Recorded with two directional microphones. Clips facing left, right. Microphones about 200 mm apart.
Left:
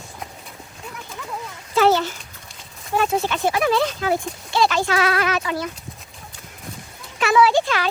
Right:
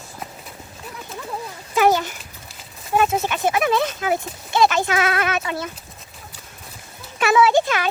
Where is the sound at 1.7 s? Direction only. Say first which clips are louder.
Left 1 dB; 15° right (ahead or behind).